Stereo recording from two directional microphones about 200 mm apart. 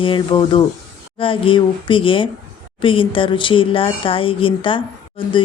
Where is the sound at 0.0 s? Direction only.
25° left (ahead or behind).